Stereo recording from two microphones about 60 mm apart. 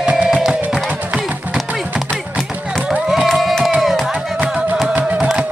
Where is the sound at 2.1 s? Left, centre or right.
Centre.